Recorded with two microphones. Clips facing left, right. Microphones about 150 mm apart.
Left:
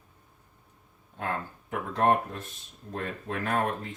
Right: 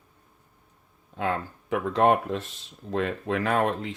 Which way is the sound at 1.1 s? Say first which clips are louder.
Right 5 dB; 90° right.